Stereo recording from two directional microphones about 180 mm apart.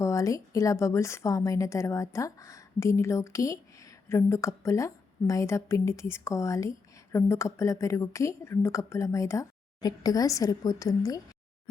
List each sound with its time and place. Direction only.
0.0 s a woman's voice: 15° left (ahead or behind)